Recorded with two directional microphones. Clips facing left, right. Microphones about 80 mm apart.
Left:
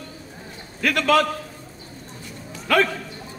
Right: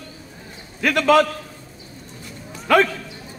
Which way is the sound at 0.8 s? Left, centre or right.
Right.